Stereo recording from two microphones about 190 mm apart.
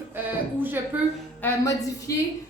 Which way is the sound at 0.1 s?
10° right (ahead or behind).